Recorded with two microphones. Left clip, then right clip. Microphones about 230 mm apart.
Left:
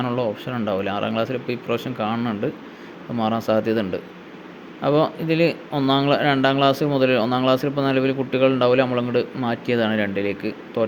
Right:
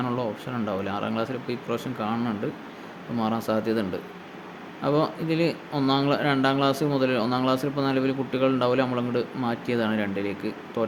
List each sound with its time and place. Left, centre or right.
0.0 s speech: centre